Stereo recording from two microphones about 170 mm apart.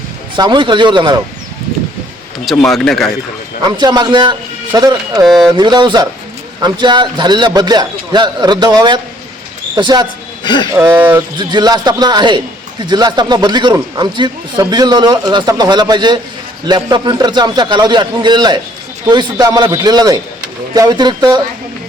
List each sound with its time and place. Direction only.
0.3 s speech: 25° right (ahead or behind)
2.4 s speech: centre (ahead or behind)
3.7 s speech: 25° right (ahead or behind)
10.4 s speech: 25° left (ahead or behind)
10.8 s speech: 15° right (ahead or behind)
11.3 s speech: 25° right (ahead or behind)